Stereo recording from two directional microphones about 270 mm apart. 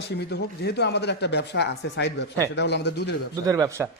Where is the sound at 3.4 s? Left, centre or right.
Centre.